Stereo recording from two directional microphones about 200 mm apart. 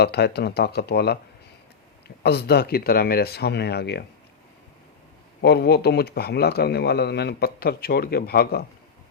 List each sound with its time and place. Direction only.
0.0 s speech: 55° left (ahead or behind)
5.4 s speech: 55° left (ahead or behind)